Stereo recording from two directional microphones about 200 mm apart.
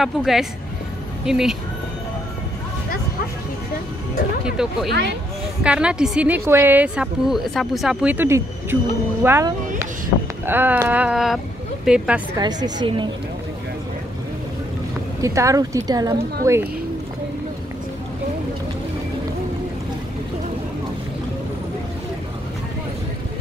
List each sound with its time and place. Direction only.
0.0 s a woman's voice: centre (ahead or behind)
4.6 s a woman's voice: 5° right (ahead or behind)
12.4 s a woman's voice: 20° right (ahead or behind)
15.2 s speech: 15° right (ahead or behind)